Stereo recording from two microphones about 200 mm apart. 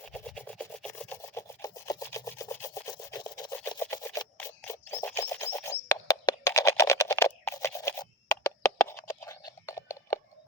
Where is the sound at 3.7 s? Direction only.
15° left (ahead or behind).